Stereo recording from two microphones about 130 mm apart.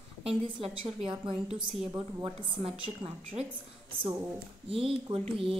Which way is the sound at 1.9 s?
20° right (ahead or behind).